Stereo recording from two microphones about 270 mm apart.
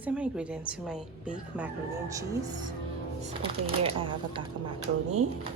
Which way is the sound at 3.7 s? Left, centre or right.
Centre.